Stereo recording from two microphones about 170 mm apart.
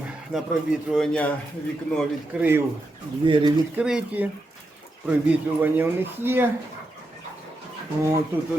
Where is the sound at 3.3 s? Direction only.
30° right (ahead or behind).